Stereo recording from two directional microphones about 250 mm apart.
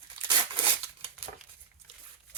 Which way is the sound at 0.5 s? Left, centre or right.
Right.